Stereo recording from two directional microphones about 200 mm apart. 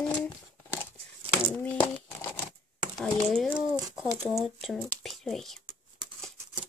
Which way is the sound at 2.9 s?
5° left (ahead or behind).